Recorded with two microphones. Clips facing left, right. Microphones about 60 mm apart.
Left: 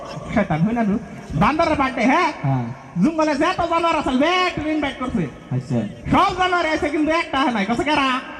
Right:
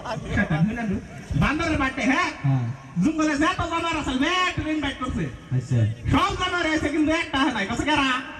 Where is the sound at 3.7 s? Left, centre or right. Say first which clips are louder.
Left 7 dB; left.